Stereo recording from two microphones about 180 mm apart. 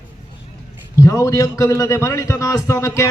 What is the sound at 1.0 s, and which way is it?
A man's voice, 15° left (ahead or behind).